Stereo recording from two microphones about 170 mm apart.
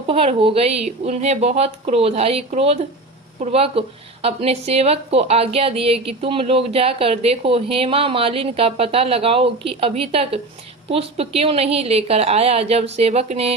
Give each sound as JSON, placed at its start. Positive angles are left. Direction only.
{"t": 0.1, "sound": "speech", "side_deg": -35}